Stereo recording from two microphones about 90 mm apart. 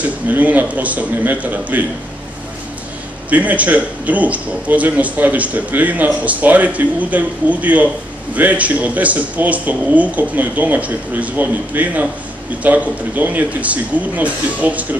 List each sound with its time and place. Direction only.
0.0 s a man's voice: 15° right (ahead or behind)
3.3 s a man's voice: 15° right (ahead or behind)